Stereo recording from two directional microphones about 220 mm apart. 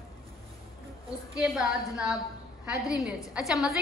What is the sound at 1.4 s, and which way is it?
A woman's voice, centre (ahead or behind).